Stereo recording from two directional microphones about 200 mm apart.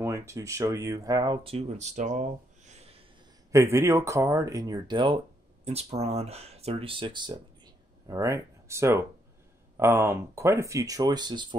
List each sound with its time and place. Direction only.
0.0 s speech: 15° right (ahead or behind); by 3.0 s 30° right (ahead or behind)
3.5 s speech: 15° right (ahead or behind)